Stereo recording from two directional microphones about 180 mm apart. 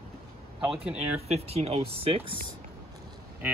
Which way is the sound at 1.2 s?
35° right (ahead or behind).